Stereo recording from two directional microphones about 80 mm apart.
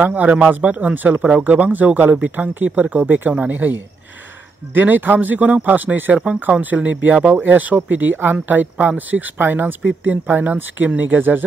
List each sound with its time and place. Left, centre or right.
0.0 s speech: centre
4.7 s speech: right